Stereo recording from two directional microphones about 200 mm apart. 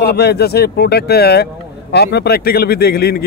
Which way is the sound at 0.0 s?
55° left (ahead or behind).